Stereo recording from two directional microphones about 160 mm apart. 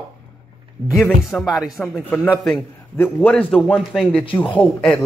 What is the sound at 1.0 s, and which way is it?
Speech, centre (ahead or behind).